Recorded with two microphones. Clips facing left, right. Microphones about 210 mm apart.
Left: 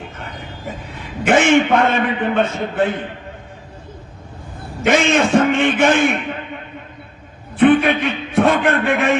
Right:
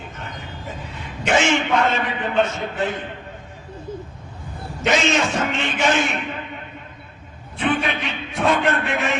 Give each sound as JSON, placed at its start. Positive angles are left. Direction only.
{"t": 0.9, "sound": "a man's voice", "side_deg": 55}
{"t": 4.9, "sound": "a man's voice", "side_deg": 55}
{"t": 7.6, "sound": "a man's voice", "side_deg": 55}